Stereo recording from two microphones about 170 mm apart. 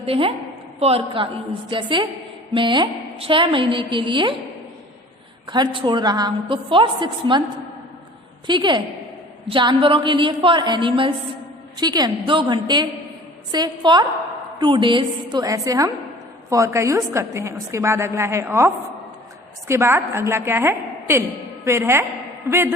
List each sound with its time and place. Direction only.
0.0 s a woman's voice: 35° right (ahead or behind)
5.5 s a woman's voice: 30° right (ahead or behind)
8.4 s a woman's voice: 25° right (ahead or behind)